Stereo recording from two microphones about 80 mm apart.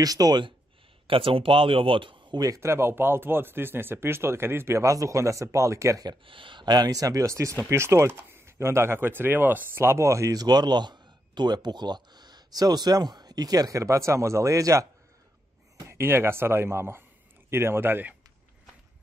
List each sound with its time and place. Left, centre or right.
0.0 s speech: right
1.0 s speech: right
2.4 s speech: right
4.8 s speech: right
6.0 s speech: right
10.4 s speech: right
15.9 s speech: right